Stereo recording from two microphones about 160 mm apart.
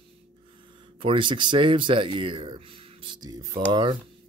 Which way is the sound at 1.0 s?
30° right (ahead or behind).